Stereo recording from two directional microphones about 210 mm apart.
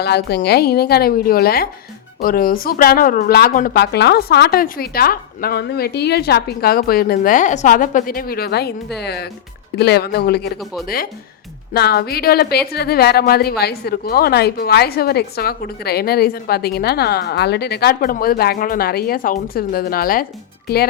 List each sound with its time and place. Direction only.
0.0 s a woman's voice: 50° left (ahead or behind)